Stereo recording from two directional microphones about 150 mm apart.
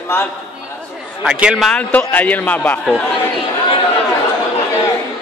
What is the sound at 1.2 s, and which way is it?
Speech, 5° right (ahead or behind).